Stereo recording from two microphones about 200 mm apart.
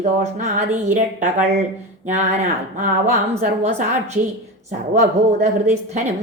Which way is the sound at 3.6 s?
35° right (ahead or behind).